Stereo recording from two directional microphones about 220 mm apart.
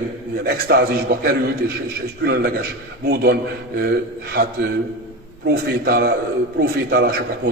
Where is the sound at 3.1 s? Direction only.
45° right (ahead or behind).